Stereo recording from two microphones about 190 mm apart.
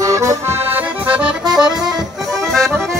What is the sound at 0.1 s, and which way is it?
Accordion, 15° right (ahead or behind).